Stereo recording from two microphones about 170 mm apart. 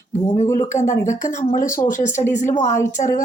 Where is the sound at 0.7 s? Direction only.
45° left (ahead or behind).